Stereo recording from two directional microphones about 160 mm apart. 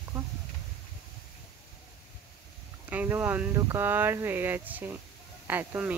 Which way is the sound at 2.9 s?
10° right (ahead or behind).